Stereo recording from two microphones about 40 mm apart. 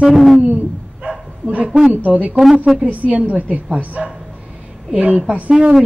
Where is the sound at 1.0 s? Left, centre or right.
Right.